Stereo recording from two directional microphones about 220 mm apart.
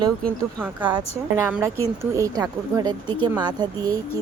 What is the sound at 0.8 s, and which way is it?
Speech, 15° right (ahead or behind).